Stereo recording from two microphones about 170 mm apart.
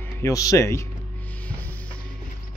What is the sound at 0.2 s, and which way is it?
Speech, 20° left (ahead or behind).